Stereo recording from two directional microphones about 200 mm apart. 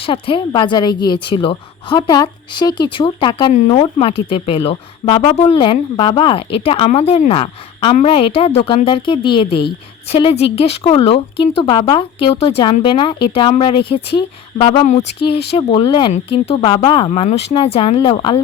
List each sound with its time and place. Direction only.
0.0 s speech: 25° left (ahead or behind)